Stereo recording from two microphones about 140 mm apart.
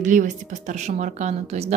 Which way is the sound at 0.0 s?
65° right (ahead or behind).